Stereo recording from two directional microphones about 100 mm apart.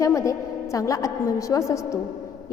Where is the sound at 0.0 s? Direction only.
30° left (ahead or behind).